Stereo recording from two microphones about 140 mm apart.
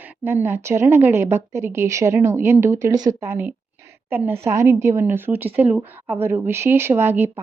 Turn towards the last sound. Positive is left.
turn(degrees=-15)  # may be behind; listen again after turning